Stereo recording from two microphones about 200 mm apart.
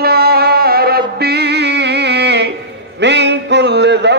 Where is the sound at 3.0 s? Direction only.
60° right (ahead or behind).